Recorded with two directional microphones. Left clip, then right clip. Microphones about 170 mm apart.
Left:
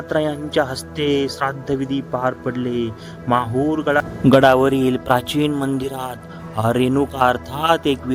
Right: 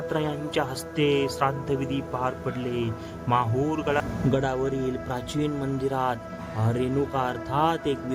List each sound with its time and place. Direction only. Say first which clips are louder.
0.1 s speech: left 10 dB; 30° left (ahead or behind)
4.3 s speech: left 16 dB; 50° left (ahead or behind)
5.9 s a man's voice: right 1 dB; 5° left (ahead or behind)
6.7 s speech: left 9 dB; 45° left (ahead or behind)